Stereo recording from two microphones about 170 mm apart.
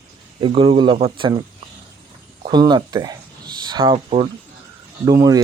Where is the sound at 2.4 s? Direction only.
25° right (ahead or behind).